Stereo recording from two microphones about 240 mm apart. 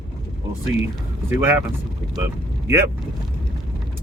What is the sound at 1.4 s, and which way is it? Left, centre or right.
Speech, centre.